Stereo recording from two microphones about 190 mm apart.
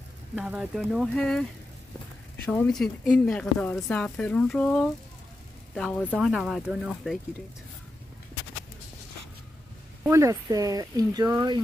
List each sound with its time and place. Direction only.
0.4 s speech: 5° right (ahead or behind)
2.4 s speech: 5° left (ahead or behind)
10.0 s speech: 15° right (ahead or behind)